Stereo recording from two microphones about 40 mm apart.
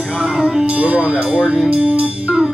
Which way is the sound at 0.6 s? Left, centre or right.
Right.